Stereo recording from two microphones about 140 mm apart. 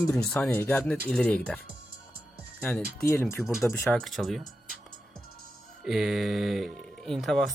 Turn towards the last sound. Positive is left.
turn(degrees=0)  # may be behind; listen again after turning